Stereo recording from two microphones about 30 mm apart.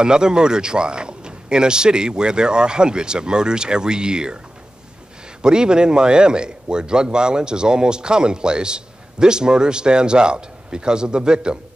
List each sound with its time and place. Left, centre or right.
0.0 s a man's voice: right
5.4 s a man's voice: right